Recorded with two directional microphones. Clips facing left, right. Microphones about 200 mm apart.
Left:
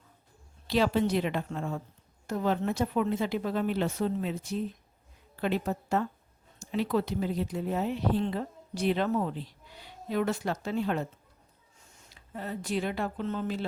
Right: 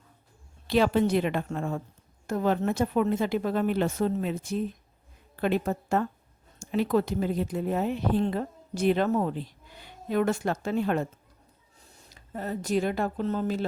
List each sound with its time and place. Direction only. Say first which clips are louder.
0.7 s speech: right 3 dB; 55° right (ahead or behind)
11.8 s speech: right 3 dB; 35° right (ahead or behind)